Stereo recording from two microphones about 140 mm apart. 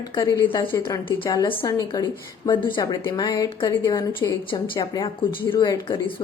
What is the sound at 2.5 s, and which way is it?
A woman's voice, 35° left (ahead or behind).